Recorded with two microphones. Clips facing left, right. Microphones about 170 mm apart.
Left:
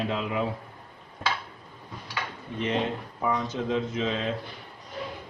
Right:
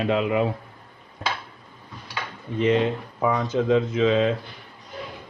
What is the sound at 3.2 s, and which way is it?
Speech, 90° right.